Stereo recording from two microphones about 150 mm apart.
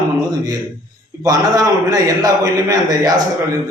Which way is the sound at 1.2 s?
25° right (ahead or behind).